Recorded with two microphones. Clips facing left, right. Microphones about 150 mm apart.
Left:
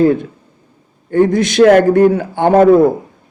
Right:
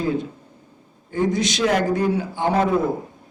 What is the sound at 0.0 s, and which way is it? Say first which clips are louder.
A man's voice: left 11 dB; 60° left (ahead or behind).